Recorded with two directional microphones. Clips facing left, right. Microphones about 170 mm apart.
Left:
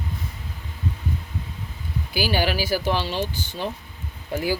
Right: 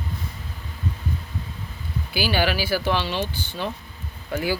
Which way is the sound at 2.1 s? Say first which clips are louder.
Even; 40° left (ahead or behind).